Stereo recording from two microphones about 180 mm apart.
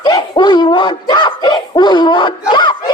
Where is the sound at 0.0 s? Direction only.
25° left (ahead or behind).